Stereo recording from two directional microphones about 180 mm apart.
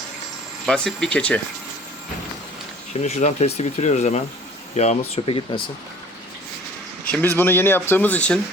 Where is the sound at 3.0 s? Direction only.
40° left (ahead or behind).